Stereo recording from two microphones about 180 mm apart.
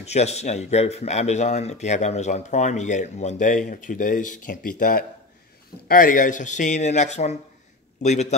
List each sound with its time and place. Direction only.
0.0 s a man's voice: 35° left (ahead or behind)